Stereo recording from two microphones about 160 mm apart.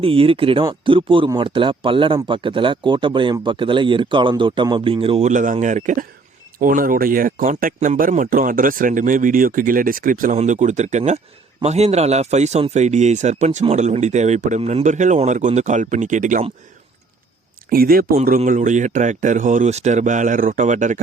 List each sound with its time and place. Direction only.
0.0 s speech: 35° right (ahead or behind)
5.3 s speech: 55° right (ahead or behind)
17.7 s speech: 65° right (ahead or behind)
18.3 s speech: 50° right (ahead or behind)